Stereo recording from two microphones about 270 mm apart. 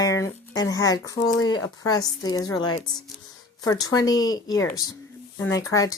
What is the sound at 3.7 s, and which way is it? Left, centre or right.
Speech, centre.